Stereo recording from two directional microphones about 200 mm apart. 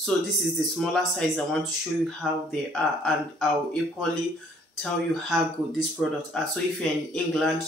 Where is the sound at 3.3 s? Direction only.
Centre (ahead or behind).